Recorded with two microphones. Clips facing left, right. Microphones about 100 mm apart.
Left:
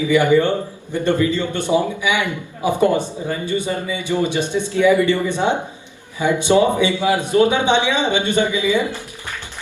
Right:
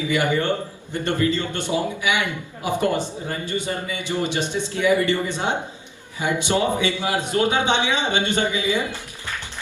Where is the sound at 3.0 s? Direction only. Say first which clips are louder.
Left 4 dB; 15° left (ahead or behind).